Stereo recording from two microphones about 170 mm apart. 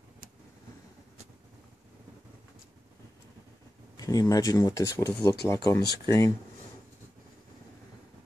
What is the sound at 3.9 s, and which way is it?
Speech, 20° left (ahead or behind).